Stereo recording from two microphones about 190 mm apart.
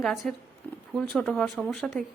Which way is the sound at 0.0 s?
Centre (ahead or behind).